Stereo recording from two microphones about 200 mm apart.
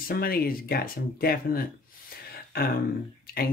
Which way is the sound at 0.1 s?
50° left (ahead or behind).